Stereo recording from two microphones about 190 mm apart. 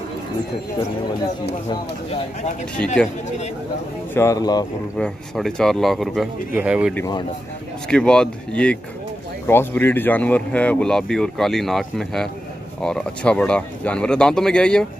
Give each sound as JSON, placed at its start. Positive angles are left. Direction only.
{"t": 4.1, "sound": "speech", "side_deg": 15}
{"t": 4.9, "sound": "speech", "side_deg": 5}
{"t": 7.9, "sound": "speech", "side_deg": 5}